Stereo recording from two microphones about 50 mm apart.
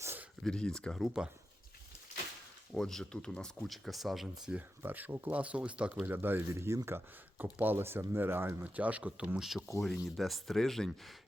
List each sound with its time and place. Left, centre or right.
0.4 s speech: centre
1.0 s speech: centre
2.7 s speech: centre
3.7 s speech: centre
4.8 s speech: right
5.9 s speech: right
6.5 s speech: right
7.8 s speech: right
8.6 s speech: right
9.4 s speech: centre